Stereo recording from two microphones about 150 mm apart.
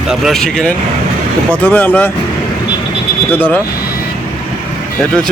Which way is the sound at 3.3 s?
15° left (ahead or behind).